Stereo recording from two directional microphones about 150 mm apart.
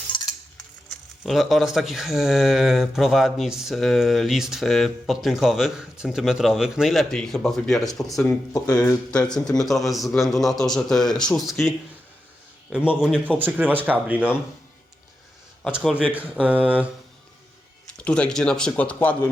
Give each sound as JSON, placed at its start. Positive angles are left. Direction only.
{"t": 0.1, "sound": "cutlery", "side_deg": 30}
{"t": 1.2, "sound": "speech", "side_deg": 0}
{"t": 12.7, "sound": "speech", "side_deg": -5}
{"t": 15.6, "sound": "speech", "side_deg": 0}
{"t": 17.8, "sound": "speech", "side_deg": 5}